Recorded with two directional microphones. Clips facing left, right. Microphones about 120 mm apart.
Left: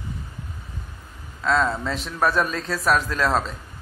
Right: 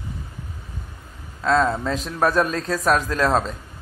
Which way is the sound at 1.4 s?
40° right (ahead or behind).